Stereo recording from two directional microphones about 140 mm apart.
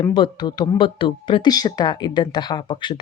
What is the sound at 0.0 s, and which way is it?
Speech, 30° left (ahead or behind).